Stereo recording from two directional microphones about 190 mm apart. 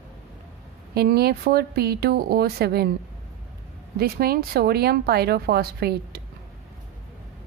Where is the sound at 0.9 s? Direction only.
55° right (ahead or behind).